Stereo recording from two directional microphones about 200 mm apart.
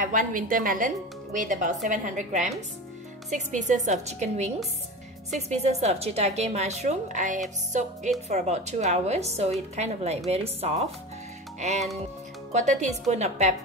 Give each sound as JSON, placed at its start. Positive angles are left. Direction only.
{"t": 0.0, "sound": "a woman's voice", "side_deg": -40}
{"t": 5.5, "sound": "a woman's voice", "side_deg": -35}
{"t": 12.5, "sound": "a woman's voice", "side_deg": -35}